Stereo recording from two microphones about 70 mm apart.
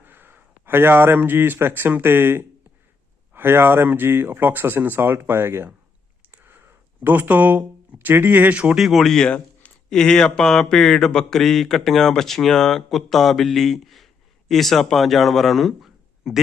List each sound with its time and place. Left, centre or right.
0.0 s a man's voice: right
6.3 s a sound: right
7.9 s speech: right
8.7 s speech: centre